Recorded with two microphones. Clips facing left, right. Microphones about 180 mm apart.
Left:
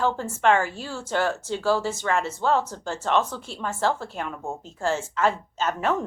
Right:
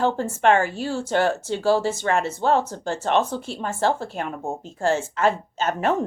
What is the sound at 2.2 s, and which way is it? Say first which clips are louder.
Speech: right 3 dB; 65° right (ahead or behind).